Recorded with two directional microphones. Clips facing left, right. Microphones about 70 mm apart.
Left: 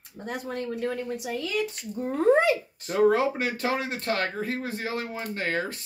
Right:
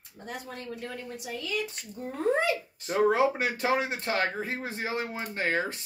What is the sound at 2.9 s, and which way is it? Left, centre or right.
Speech, centre.